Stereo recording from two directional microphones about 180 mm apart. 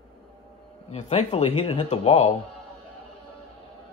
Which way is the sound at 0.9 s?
40° left (ahead or behind).